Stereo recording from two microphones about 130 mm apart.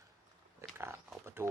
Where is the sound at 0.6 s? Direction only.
20° right (ahead or behind).